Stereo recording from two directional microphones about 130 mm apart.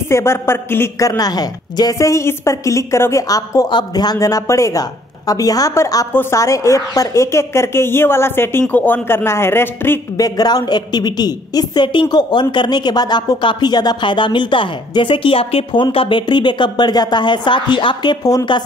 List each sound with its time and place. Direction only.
0.1 s a woman's voice: 20° left (ahead or behind)
10.2 s a woman's voice: 30° left (ahead or behind)